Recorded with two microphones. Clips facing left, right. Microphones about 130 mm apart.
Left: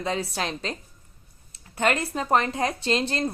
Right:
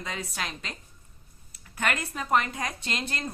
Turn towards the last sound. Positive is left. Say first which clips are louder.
# left 9 dB
turn(degrees=30)  # may be behind; listen again after turning